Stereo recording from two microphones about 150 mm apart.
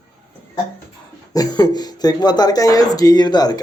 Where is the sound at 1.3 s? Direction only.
25° left (ahead or behind).